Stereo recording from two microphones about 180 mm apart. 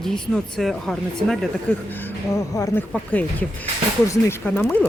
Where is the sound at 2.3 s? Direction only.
15° left (ahead or behind).